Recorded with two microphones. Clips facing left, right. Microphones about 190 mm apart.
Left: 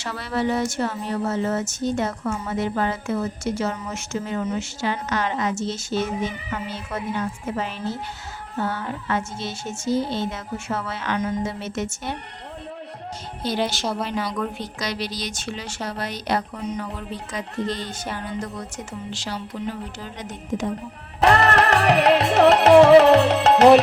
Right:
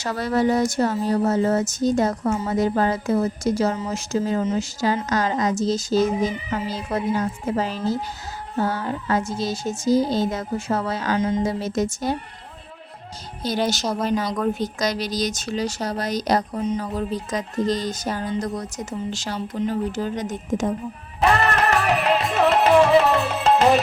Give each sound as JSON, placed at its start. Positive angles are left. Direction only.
{"t": 0.0, "sound": "a woman's voice", "side_deg": -40}
{"t": 13.4, "sound": "a woman's voice", "side_deg": -40}
{"t": 21.2, "sound": "music", "side_deg": 70}